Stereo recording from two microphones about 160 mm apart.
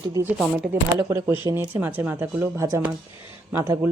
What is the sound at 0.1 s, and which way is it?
Speech, 15° right (ahead or behind).